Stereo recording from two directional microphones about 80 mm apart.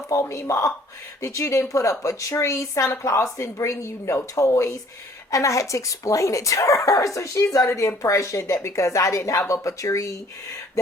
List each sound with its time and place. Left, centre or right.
0.1 s speech: left